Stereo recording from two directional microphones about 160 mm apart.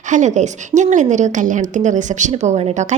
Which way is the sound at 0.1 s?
50° right (ahead or behind).